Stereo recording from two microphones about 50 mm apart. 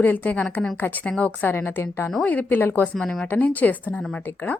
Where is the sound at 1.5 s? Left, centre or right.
Left.